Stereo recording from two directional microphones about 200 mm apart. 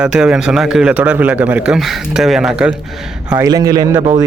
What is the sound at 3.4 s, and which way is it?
Speech, 20° right (ahead or behind).